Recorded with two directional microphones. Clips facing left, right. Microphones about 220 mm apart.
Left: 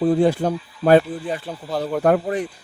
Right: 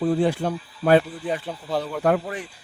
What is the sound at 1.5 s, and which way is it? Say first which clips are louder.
Speech: left 1 dB; 5° left (ahead or behind).